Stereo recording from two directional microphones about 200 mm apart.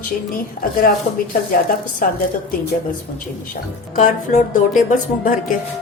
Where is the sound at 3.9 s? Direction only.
40° left (ahead or behind).